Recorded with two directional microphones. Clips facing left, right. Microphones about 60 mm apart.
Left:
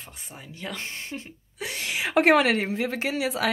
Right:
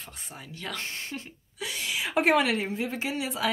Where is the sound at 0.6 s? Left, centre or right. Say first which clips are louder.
Left 1 dB; centre.